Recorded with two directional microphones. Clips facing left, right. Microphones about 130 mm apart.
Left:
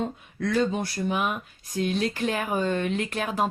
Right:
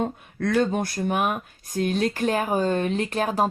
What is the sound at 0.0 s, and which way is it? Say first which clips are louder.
Speech: right 3 dB; 50° right (ahead or behind).